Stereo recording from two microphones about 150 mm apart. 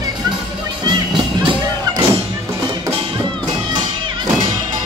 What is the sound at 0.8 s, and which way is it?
Music, 30° right (ahead or behind).